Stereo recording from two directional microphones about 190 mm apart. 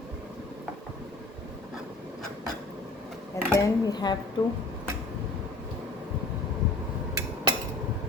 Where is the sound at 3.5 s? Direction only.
20° left (ahead or behind).